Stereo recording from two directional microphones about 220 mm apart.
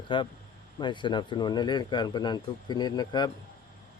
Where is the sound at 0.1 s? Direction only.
20° left (ahead or behind).